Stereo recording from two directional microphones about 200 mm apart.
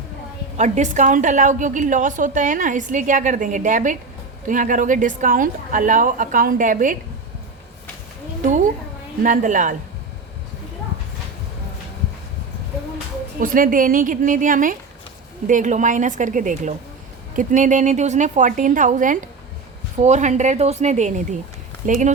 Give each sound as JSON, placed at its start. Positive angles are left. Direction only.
{"t": 0.5, "sound": "a woman's voice", "side_deg": -35}
{"t": 8.4, "sound": "a woman's voice", "side_deg": -40}
{"t": 13.4, "sound": "a woman's voice", "side_deg": -45}